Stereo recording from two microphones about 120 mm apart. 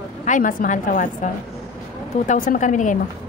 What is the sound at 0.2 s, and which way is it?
A woman's voice, 90° left.